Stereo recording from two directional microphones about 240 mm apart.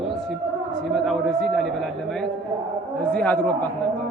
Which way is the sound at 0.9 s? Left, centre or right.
Centre.